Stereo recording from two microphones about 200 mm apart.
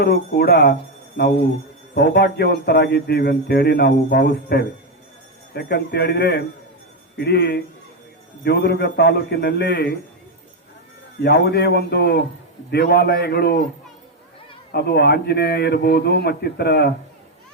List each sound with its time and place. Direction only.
0.0 s a man's voice: 50° left (ahead or behind)
11.2 s a man's voice: 55° left (ahead or behind)
14.7 s a man's voice: 55° left (ahead or behind)